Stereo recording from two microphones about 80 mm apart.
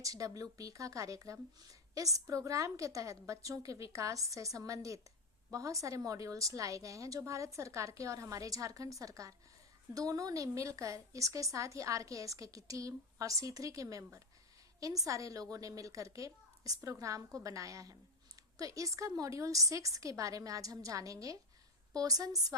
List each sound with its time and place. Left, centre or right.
0.0 s speech: right